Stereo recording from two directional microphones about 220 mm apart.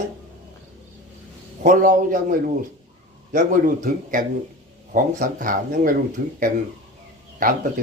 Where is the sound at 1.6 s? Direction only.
35° right (ahead or behind).